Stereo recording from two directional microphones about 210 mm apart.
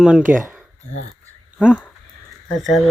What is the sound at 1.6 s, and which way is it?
Speech, 5° right (ahead or behind).